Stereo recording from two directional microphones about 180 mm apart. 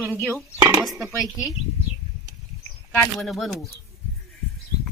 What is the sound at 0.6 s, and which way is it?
Speech, 20° right (ahead or behind).